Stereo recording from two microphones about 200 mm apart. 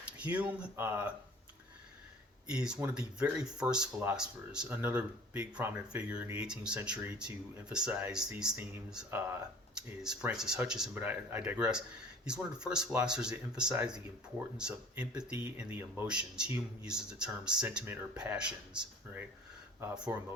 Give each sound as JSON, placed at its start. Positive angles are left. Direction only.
{"t": 0.2, "sound": "speech", "side_deg": -5}
{"t": 2.5, "sound": "speech", "side_deg": -5}
{"t": 14.7, "sound": "speech", "side_deg": -15}